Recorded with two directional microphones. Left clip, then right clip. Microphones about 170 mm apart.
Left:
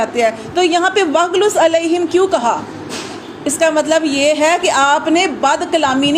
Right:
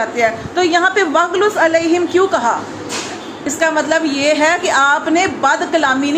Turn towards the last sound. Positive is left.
turn(degrees=40)  # may be behind; listen again after turning